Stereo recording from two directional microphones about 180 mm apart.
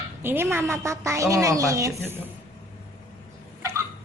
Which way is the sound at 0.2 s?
10° right (ahead or behind).